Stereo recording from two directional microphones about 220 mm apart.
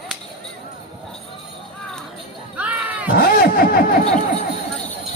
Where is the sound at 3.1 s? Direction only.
45° left (ahead or behind).